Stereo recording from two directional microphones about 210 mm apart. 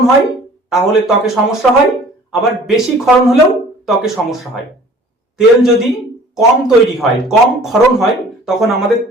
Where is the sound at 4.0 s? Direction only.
Centre (ahead or behind).